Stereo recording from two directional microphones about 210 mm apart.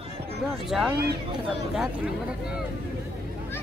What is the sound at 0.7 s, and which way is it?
Speech, centre (ahead or behind).